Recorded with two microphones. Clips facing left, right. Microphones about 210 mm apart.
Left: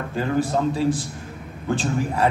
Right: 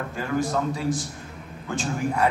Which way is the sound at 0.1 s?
30° left (ahead or behind).